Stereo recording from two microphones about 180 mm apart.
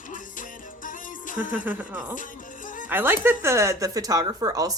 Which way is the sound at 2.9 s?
10° right (ahead or behind).